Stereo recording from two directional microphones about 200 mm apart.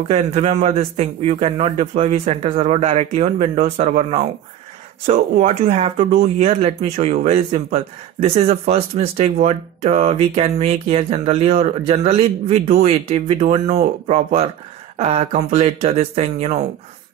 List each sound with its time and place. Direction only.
0.1 s speech: 30° right (ahead or behind)